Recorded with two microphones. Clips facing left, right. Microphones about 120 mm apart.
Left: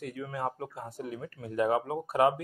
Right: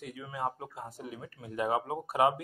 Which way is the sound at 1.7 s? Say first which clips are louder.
Left 2 dB; 25° right (ahead or behind).